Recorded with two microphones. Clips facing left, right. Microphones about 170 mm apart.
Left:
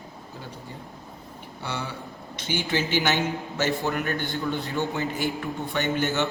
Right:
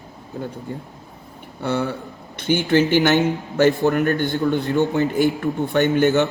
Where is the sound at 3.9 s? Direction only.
40° right (ahead or behind).